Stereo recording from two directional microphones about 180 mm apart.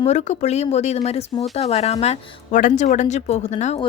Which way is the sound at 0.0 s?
40° left (ahead or behind).